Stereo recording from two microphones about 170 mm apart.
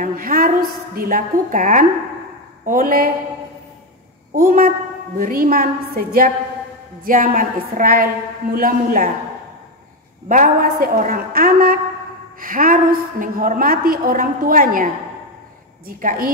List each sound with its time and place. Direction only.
0.0 s a woman's voice: 55° right (ahead or behind)
4.4 s a woman's voice: 55° right (ahead or behind)
10.2 s a woman's voice: 50° right (ahead or behind)
16.0 s speech: 50° right (ahead or behind)